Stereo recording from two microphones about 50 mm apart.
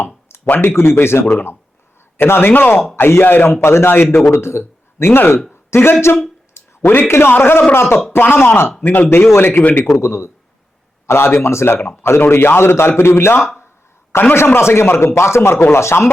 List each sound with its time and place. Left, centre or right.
0.4 s a man's voice: left
4.3 s a man's voice: left
8.8 s speech: left
9.0 s a man's voice: left
9.9 s a man's voice: left
14.3 s a man's voice: left